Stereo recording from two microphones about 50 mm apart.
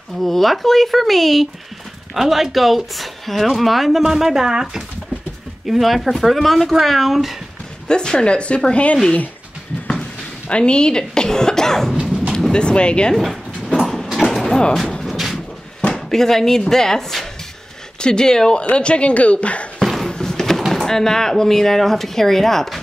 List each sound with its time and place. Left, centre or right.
0.2 s speech: centre
7.9 s speech: centre
10.5 s speech: centre
13.1 s speech: centre
13.7 s sliding door: centre
15.0 s a sound: centre
15.9 s speech: centre; by 19.7 s left
19.8 s a sound: centre
20.1 s a sound: centre
20.7 s speech: centre